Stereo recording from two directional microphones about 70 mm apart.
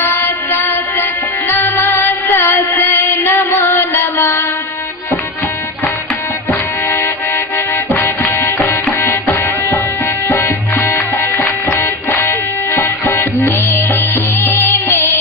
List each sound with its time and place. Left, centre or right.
0.0 s music: left
7.5 s music: left